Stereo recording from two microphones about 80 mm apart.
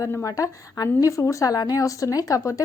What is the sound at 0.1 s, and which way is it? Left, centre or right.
Speech, left.